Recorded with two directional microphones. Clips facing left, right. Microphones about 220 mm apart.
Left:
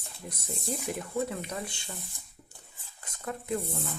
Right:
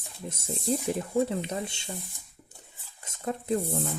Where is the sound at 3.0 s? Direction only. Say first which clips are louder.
Right 5 dB; 25° right (ahead or behind).